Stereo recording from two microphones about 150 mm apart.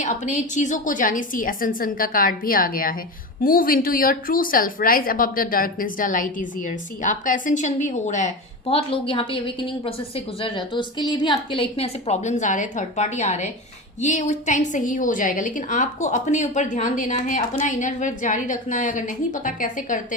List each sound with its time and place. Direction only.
0.0 s a woman's voice: 55° left (ahead or behind)